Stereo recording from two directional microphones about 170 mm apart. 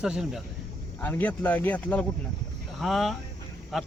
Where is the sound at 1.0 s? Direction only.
10° left (ahead or behind).